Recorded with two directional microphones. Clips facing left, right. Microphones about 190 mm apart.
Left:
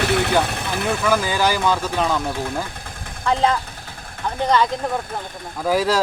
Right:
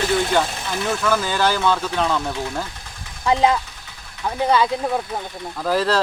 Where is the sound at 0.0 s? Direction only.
65° left (ahead or behind).